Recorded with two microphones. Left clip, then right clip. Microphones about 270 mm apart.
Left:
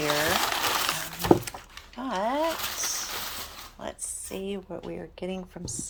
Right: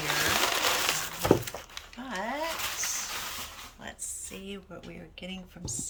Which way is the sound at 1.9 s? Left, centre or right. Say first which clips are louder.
Left 7 dB; centre.